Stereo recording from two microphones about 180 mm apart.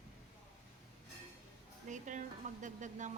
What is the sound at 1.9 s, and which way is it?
Speech, 45° right (ahead or behind).